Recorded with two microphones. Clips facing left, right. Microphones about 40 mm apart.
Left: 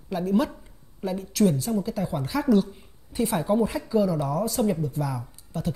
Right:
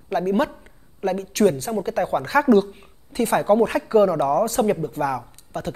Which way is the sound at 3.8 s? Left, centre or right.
Right.